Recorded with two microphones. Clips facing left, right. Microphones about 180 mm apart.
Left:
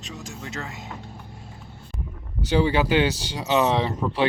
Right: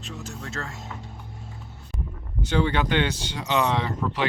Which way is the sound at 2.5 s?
10° left (ahead or behind).